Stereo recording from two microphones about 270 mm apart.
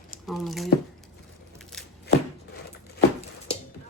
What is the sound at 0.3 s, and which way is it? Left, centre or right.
Speech, centre.